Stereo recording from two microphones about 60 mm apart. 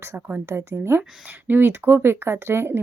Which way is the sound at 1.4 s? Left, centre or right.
Right.